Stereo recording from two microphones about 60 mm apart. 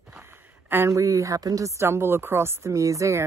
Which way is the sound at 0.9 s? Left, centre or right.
Right.